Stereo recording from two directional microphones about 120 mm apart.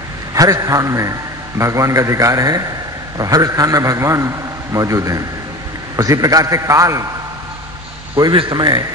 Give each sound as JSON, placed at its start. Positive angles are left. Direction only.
{"t": 0.3, "sound": "a man's voice", "side_deg": -30}
{"t": 8.2, "sound": "a man's voice", "side_deg": -40}